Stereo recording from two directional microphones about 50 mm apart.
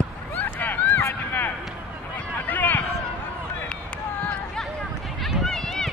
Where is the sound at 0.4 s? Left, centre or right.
Left.